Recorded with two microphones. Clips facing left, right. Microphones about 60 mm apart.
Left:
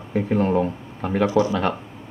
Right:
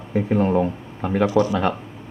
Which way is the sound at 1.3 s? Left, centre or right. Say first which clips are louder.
Even; centre.